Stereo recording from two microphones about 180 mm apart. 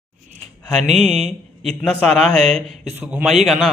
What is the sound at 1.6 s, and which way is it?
A man's voice, 5° left (ahead or behind).